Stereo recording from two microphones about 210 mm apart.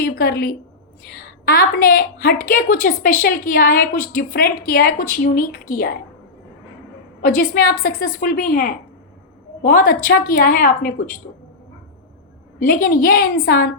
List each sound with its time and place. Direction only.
0.0 s a woman's voice: 45° left (ahead or behind)
7.2 s a woman's voice: 40° left (ahead or behind)
12.5 s a woman's voice: 45° left (ahead or behind)